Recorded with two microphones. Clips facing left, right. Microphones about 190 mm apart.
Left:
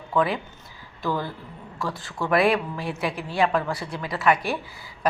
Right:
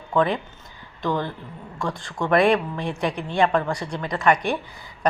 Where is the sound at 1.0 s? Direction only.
5° left (ahead or behind).